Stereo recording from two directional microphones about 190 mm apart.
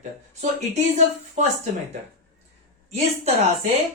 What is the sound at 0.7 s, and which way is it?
Speech, 40° right (ahead or behind).